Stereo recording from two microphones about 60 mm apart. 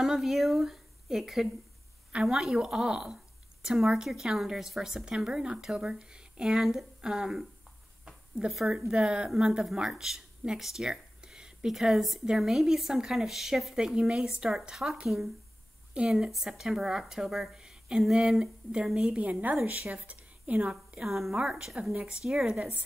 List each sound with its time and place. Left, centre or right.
0.0 s a woman's voice: centre
8.5 s a woman's voice: centre
8.7 s a woman's voice: centre
17.6 s a sound: centre
18.0 s a woman's voice: centre; by 19.5 s right
20.1 s a sound: right
21.0 s a woman's voice: centre
21.4 s a woman's voice: centre
22.2 s a woman's voice: centre